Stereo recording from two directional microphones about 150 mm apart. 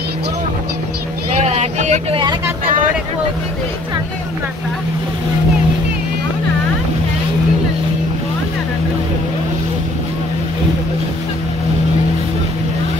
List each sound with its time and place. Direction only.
1.4 s vehicle: 45° right (ahead or behind)